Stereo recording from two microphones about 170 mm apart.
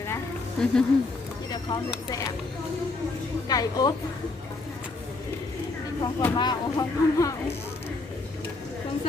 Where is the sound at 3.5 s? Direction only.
20° left (ahead or behind).